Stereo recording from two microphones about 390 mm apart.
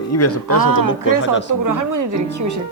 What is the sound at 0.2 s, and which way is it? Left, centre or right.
Speech, left.